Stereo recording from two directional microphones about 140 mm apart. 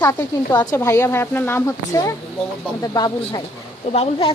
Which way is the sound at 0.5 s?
25° left (ahead or behind).